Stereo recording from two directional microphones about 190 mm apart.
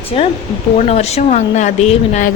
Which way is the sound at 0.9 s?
35° left (ahead or behind).